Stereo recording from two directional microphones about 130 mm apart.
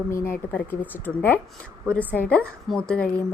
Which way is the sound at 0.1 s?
20° left (ahead or behind).